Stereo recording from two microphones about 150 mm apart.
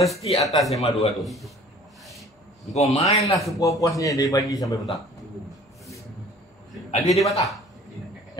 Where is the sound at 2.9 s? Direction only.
45° left (ahead or behind).